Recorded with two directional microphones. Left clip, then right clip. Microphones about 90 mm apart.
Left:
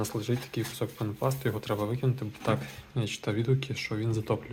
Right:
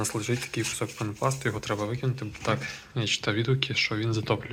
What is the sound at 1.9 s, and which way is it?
Speech, 35° left (ahead or behind).